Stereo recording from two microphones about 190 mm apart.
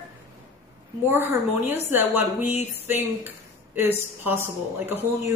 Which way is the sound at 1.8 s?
10° right (ahead or behind).